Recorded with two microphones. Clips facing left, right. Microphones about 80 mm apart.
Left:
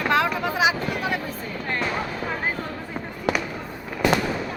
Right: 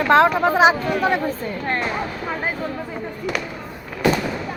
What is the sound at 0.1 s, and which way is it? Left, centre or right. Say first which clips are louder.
Speech: right 9 dB; right.